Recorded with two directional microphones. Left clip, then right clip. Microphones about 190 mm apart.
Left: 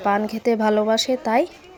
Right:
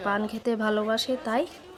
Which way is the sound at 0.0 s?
15° left (ahead or behind).